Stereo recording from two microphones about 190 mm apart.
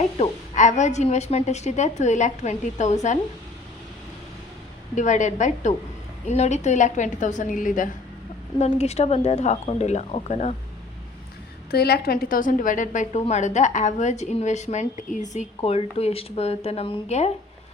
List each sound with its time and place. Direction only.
0.2 s a woman's voice: 40° left (ahead or behind)
4.9 s a woman's voice: 40° left (ahead or behind)
11.7 s a woman's voice: 55° left (ahead or behind); by 17.3 s 35° left (ahead or behind)